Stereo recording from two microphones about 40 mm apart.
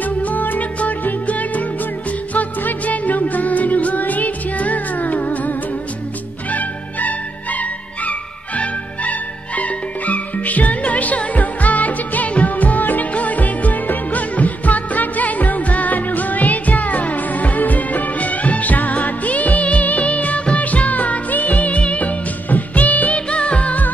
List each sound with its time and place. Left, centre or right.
0.0 s music: left
6.5 s music: left